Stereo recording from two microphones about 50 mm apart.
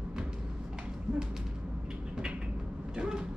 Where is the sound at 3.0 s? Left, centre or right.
Centre.